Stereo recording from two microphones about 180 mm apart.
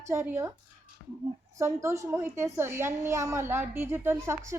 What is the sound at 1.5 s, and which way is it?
A woman's voice, 15° right (ahead or behind).